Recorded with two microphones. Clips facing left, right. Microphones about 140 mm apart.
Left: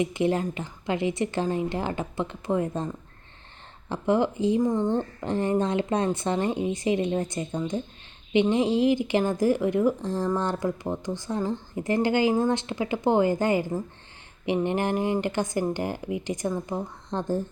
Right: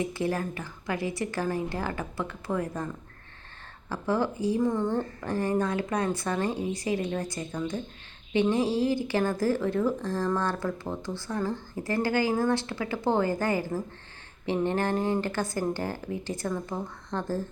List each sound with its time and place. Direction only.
0.0 s speech: 20° left (ahead or behind)